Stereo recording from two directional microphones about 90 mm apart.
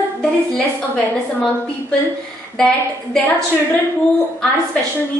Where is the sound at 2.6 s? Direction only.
10° left (ahead or behind).